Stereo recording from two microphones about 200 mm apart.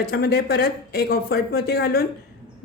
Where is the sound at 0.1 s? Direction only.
50° left (ahead or behind).